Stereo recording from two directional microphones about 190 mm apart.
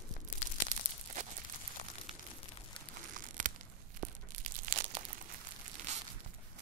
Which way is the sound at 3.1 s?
45° right (ahead or behind).